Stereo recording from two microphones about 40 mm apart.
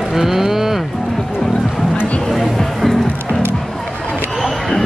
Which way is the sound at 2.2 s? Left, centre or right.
Centre.